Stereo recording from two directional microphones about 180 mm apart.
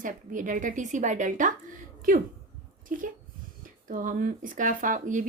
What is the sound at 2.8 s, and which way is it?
Speech, 50° right (ahead or behind).